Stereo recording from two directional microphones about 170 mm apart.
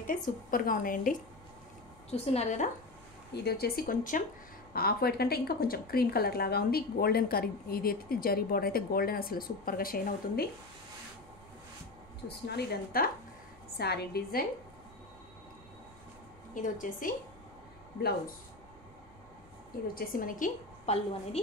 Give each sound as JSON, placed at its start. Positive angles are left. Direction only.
{"t": 0.5, "sound": "a woman's voice", "side_deg": 55}
{"t": 2.0, "sound": "a woman's voice", "side_deg": 40}
{"t": 3.3, "sound": "speech", "side_deg": 70}
{"t": 4.7, "sound": "speech", "side_deg": 65}
{"t": 12.4, "sound": "a woman's voice", "side_deg": 65}
{"t": 16.5, "sound": "a woman's voice", "side_deg": 50}
{"t": 19.9, "sound": "a woman's voice", "side_deg": 55}